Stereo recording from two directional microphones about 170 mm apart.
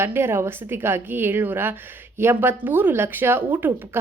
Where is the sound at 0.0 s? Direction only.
15° right (ahead or behind).